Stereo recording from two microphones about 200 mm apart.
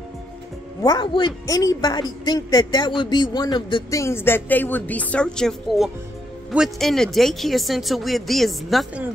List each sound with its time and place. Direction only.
0.8 s speech: 20° left (ahead or behind); by 9.0 s centre (ahead or behind)